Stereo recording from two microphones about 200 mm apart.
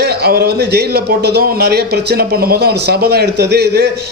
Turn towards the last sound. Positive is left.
turn(degrees=-55)  # may be behind; listen again after turning